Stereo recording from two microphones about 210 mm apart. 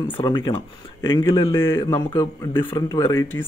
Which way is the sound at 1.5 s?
10° left (ahead or behind).